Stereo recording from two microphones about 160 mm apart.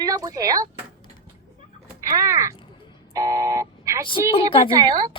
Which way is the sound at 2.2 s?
20° right (ahead or behind).